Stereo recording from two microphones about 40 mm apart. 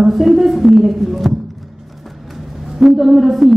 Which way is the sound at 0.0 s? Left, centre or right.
Centre.